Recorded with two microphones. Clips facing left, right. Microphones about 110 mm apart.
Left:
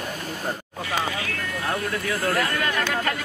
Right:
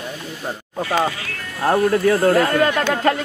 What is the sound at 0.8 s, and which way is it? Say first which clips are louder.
Speech: right 6 dB; 40° right (ahead or behind).